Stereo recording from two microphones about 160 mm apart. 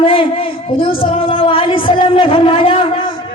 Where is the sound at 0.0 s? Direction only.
35° left (ahead or behind).